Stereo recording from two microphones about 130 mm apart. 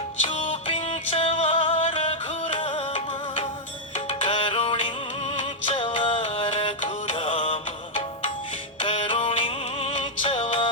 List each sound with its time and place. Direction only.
0.5 s music: 50° left (ahead or behind)